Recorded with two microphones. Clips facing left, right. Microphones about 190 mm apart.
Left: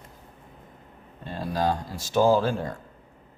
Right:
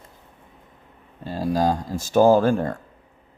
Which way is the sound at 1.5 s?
40° right (ahead or behind).